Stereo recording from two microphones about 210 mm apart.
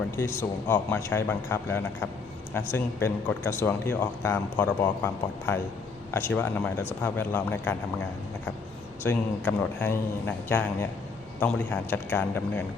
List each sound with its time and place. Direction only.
0.2 s a man's voice: 10° left (ahead or behind)
9.0 s a man's voice: 10° left (ahead or behind)